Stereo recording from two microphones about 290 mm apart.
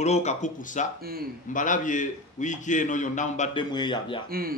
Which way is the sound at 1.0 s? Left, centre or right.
Right.